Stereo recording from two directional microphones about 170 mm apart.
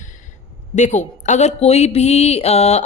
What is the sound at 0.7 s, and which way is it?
Speech, 45° left (ahead or behind).